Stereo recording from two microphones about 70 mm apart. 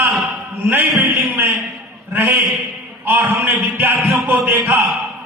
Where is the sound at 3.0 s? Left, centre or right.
Right.